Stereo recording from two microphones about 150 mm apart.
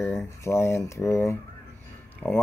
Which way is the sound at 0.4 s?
20° left (ahead or behind).